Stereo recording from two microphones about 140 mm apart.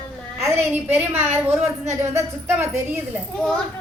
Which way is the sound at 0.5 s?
15° right (ahead or behind).